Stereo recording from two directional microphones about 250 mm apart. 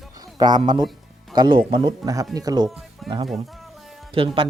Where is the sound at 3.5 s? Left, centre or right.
Centre.